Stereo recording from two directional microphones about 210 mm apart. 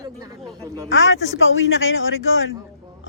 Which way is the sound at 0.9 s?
65° left (ahead or behind).